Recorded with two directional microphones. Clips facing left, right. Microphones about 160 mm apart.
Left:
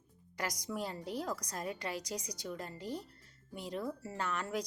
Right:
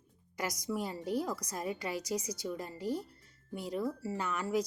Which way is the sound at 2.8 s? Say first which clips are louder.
Right 8 dB; 45° right (ahead or behind).